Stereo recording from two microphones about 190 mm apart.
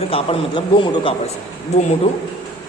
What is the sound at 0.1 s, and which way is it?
A man's voice, 25° left (ahead or behind).